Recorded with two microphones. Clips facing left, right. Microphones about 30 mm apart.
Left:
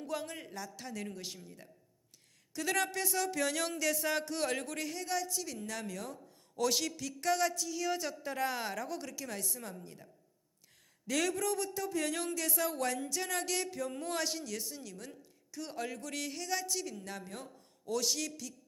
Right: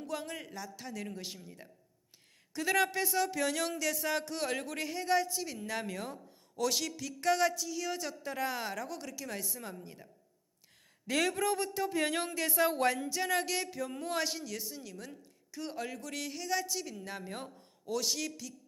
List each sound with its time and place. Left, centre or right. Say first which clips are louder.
0.0 s a man's voice: even; centre; by 6.1 s right
6.6 s speech: even; centre
11.0 s speech: right 2 dB; right
13.0 s speech: right 4 dB; centre